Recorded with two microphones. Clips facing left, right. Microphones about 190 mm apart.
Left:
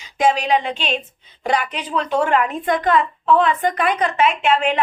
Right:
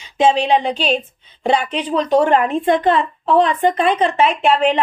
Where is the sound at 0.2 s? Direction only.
25° right (ahead or behind).